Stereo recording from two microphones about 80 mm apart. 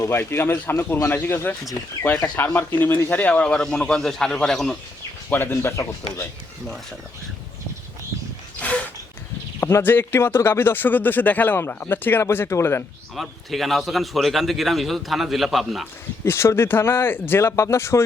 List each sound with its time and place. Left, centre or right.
0.1 s speech: left
2.6 s a man's voice: left; by 4.8 s centre
5.3 s speech: left
8.6 s a sound: centre
9.6 s speech: left
13.1 s a man's voice: centre
16.2 s speech: left